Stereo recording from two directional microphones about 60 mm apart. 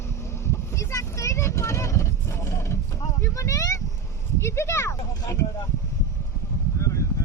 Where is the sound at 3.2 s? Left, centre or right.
Left.